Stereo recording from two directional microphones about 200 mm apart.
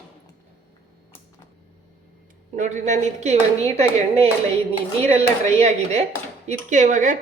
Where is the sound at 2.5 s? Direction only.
40° right (ahead or behind).